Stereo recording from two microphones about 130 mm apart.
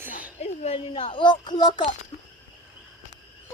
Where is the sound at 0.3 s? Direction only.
50° left (ahead or behind); by 1.8 s 35° left (ahead or behind).